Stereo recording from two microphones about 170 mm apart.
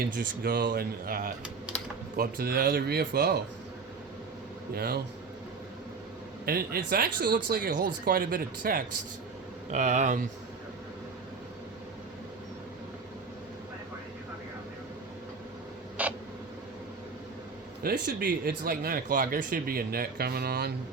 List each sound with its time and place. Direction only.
0.0 s speech: 65° right (ahead or behind)
4.7 s speech: 65° right (ahead or behind)
6.4 s speech: 65° right (ahead or behind)
9.7 s speech: 45° right (ahead or behind)
16.0 s a sound: 10° right (ahead or behind)
17.8 s speech: 65° right (ahead or behind)